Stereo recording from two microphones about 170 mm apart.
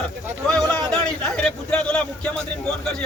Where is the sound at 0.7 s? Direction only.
5° left (ahead or behind).